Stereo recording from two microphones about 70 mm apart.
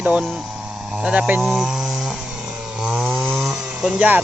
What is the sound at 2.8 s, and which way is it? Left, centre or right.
Chainsaw, centre.